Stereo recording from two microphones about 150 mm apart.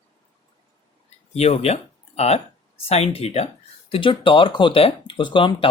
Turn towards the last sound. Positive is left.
turn(degrees=35)  # may be behind; listen again after turning